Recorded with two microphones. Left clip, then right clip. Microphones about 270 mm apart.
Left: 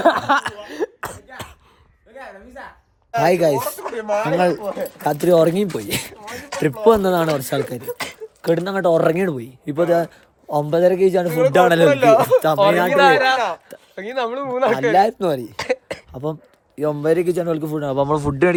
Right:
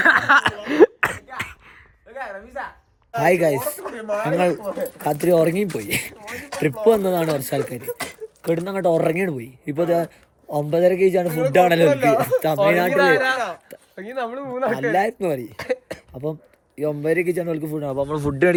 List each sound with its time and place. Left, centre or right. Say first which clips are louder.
0.0 s cough: right 2 dB; centre
2.1 s music: right 5 dB; centre
3.1 s speech: left 2 dB; centre
11.9 s speech: left 5 dB; left
12.4 s speech: left 3 dB; centre